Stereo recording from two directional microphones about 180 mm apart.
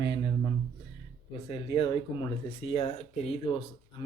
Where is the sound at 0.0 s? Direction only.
25° left (ahead or behind).